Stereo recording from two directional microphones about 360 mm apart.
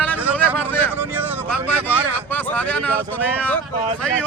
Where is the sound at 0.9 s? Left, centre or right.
Centre.